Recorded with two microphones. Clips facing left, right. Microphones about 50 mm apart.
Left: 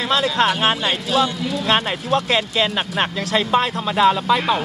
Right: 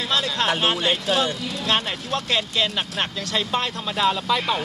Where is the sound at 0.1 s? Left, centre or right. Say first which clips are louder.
Left 5 dB; left.